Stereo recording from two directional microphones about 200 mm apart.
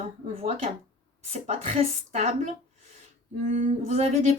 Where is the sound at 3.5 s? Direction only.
35° right (ahead or behind).